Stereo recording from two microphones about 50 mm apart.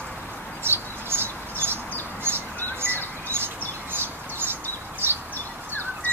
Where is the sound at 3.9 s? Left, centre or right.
Right.